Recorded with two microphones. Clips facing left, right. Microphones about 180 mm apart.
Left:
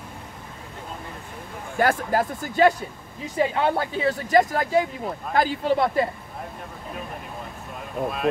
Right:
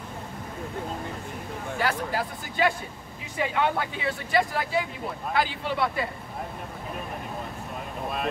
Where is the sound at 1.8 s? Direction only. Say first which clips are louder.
Left 7 dB; 50° left (ahead or behind).